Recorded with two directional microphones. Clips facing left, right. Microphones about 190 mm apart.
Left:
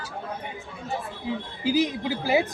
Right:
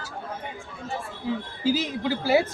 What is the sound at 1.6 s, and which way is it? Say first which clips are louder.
Speech: left 2 dB; 15° left (ahead or behind).